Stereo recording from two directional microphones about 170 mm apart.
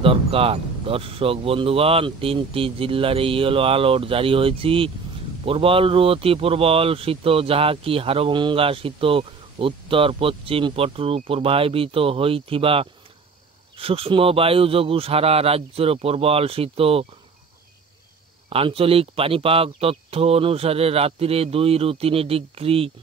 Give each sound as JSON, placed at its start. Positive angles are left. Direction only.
{"t": 0.0, "sound": "speech", "side_deg": -35}
{"t": 18.5, "sound": "speech", "side_deg": -35}